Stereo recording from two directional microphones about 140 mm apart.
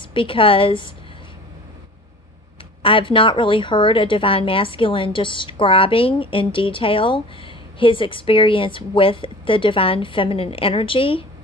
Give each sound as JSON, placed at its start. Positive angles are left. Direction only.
{"t": 0.1, "sound": "speech", "side_deg": 40}
{"t": 2.8, "sound": "speech", "side_deg": 40}